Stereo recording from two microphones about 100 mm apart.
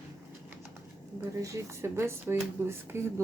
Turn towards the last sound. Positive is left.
turn(degrees=-25)  # may be behind; listen again after turning